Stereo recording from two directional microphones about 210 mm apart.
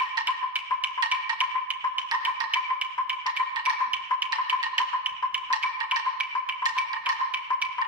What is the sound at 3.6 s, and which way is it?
Music, 5° right (ahead or behind).